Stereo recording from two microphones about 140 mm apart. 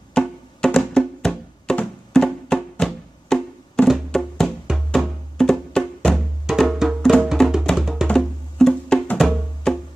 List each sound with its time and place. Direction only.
0.1 s music: 5° left (ahead or behind)